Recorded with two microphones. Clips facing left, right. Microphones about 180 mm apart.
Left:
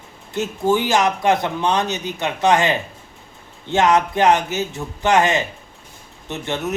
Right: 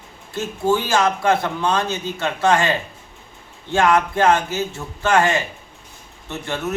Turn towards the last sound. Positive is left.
turn(degrees=20)  # may be behind; listen again after turning